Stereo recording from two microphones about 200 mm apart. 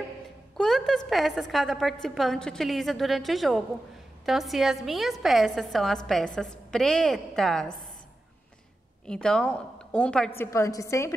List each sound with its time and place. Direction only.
0.6 s a woman's voice: centre (ahead or behind)
9.0 s a woman's voice: 5° left (ahead or behind)